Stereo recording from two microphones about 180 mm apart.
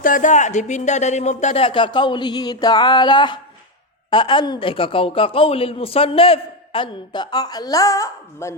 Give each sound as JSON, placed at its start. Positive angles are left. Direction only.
{"t": 0.0, "sound": "a woman's voice", "side_deg": 45}